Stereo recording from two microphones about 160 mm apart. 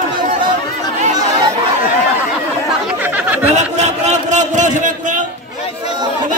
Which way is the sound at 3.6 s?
45° right (ahead or behind).